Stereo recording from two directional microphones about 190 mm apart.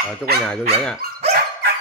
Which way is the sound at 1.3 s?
60° right (ahead or behind).